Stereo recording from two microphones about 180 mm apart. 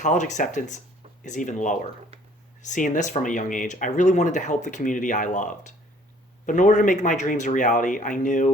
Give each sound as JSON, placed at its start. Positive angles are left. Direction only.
{"t": 0.0, "sound": "speech", "side_deg": 45}